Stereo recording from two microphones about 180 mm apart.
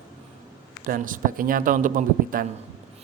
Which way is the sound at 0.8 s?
50° right (ahead or behind).